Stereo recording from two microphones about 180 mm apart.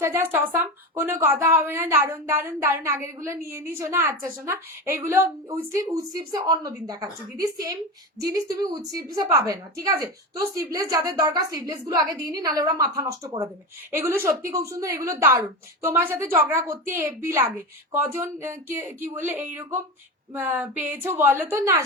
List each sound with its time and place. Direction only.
0.0 s a woman's voice: 10° right (ahead or behind)
8.2 s a woman's voice: 20° right (ahead or behind)